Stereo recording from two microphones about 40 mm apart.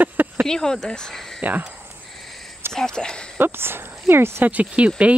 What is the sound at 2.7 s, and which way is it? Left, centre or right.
Speech, centre.